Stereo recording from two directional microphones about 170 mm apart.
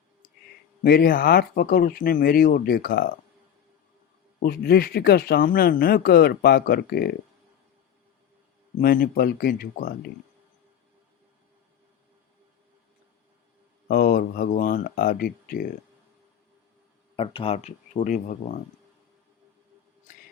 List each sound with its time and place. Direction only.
0.9 s speech: 60° left (ahead or behind)
4.4 s speech: 65° left (ahead or behind)
8.8 s speech: 60° left (ahead or behind)
13.8 s speech: 55° left (ahead or behind)
17.2 s speech: 35° left (ahead or behind)